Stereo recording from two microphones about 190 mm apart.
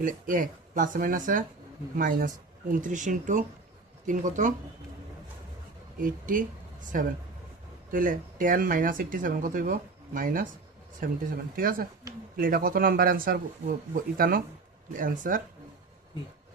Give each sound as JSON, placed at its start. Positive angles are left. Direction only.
{"t": 0.0, "sound": "speech", "side_deg": -45}
{"t": 6.0, "sound": "speech", "side_deg": -45}